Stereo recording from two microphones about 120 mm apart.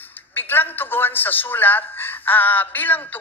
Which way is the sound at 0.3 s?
15° left (ahead or behind).